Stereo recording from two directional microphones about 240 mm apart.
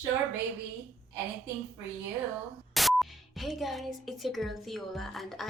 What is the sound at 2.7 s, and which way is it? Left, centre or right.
Speech, centre.